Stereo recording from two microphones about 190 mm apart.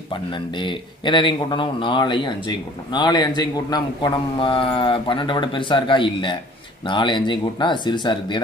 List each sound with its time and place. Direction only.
0.1 s speech: 25° left (ahead or behind)